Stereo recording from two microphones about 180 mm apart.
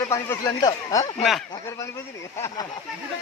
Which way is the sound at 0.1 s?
15° left (ahead or behind).